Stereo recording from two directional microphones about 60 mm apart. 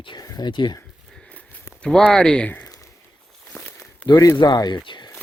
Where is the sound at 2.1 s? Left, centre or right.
Centre.